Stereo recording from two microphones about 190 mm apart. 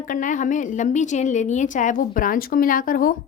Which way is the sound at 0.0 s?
45° left (ahead or behind).